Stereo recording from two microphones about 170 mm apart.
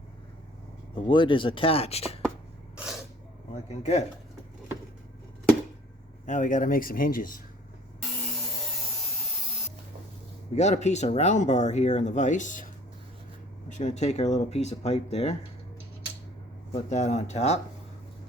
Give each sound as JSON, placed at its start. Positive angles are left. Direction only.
{"t": 0.9, "sound": "speech", "side_deg": 30}
{"t": 3.5, "sound": "speech", "side_deg": 40}
{"t": 6.2, "sound": "speech", "side_deg": 45}
{"t": 10.5, "sound": "speech", "side_deg": 45}
{"t": 16.7, "sound": "speech", "side_deg": 40}